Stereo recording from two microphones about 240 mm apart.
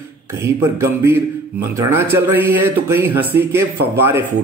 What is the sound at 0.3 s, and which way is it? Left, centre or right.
A man's voice, centre.